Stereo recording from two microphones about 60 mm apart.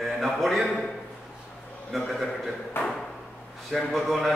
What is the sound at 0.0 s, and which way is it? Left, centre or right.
Speech, centre.